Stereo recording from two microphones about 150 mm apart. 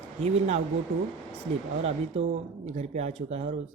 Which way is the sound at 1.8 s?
45° right (ahead or behind).